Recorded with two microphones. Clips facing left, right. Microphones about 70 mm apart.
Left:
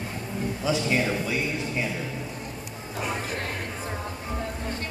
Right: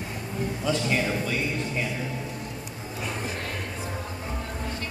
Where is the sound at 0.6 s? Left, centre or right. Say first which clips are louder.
Left 1 dB; centre.